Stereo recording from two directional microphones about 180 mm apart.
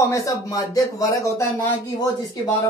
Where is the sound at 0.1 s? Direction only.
20° left (ahead or behind).